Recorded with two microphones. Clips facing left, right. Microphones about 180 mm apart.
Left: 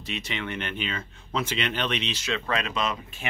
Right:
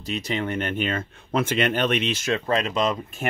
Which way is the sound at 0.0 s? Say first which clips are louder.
Right 6 dB; 40° right (ahead or behind).